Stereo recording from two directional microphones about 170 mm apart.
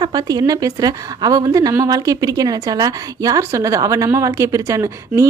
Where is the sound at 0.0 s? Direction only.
25° right (ahead or behind).